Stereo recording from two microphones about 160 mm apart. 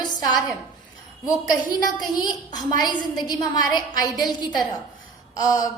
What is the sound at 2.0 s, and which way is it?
A woman's voice, 25° left (ahead or behind).